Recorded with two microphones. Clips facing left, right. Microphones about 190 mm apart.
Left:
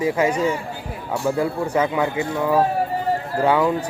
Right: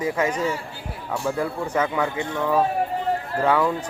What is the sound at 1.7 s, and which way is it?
Speech, 15° left (ahead or behind).